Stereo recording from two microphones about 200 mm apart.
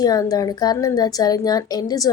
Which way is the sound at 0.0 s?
20° left (ahead or behind).